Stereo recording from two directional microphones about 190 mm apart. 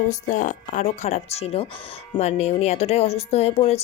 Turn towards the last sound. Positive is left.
turn(degrees=35)  # may be behind; listen again after turning